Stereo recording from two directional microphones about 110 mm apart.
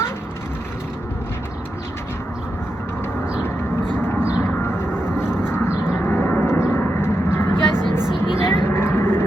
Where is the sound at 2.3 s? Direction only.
10° right (ahead or behind).